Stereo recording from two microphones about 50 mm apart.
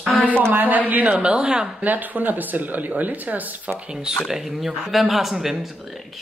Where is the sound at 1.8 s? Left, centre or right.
Right.